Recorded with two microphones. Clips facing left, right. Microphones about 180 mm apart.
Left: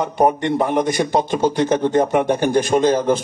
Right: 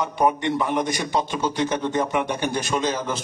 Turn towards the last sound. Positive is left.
turn(degrees=50)  # may be behind; listen again after turning